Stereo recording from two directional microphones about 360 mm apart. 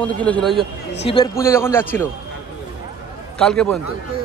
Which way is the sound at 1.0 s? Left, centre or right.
Centre.